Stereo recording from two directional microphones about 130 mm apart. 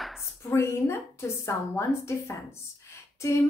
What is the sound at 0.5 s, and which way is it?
A woman's voice, 20° left (ahead or behind).